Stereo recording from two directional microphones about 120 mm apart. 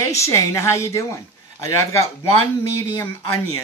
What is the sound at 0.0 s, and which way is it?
Speech, 25° left (ahead or behind).